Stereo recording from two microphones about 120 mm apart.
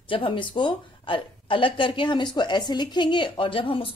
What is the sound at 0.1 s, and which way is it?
Speech, 45° left (ahead or behind).